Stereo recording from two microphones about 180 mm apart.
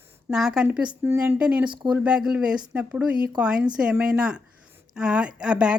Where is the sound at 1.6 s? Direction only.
25° right (ahead or behind).